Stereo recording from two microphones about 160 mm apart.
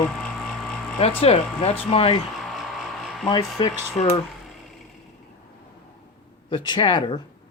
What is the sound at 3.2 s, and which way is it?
Speech, 25° left (ahead or behind).